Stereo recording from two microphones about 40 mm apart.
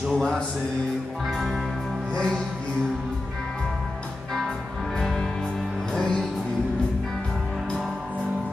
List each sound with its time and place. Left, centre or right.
0.1 s music: centre
1.2 s music: centre
2.1 s music: centre
5.0 s music: centre